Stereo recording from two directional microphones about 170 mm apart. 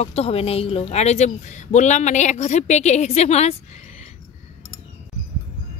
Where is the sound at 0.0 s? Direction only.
35° left (ahead or behind).